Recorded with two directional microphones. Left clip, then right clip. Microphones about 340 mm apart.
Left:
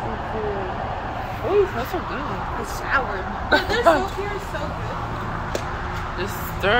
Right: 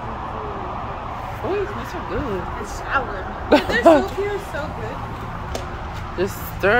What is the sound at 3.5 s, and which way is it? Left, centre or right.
Speech, right.